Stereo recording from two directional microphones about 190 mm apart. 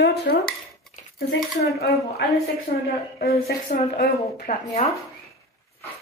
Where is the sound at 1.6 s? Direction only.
55° left (ahead or behind).